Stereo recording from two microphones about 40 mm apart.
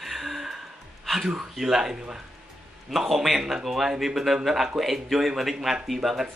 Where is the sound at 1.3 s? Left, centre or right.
Centre.